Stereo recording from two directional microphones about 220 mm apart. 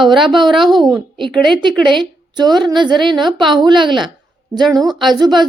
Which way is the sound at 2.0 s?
20° right (ahead or behind).